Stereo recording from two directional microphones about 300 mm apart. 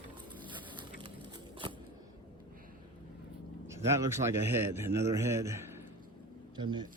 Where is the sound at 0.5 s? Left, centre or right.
Centre.